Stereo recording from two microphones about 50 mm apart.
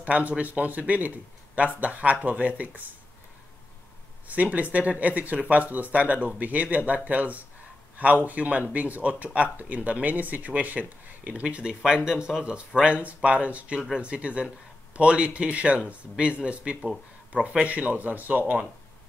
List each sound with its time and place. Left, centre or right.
0.0 s speech: right
4.3 s speech: right
11.4 s speech: centre
17.6 s speech: right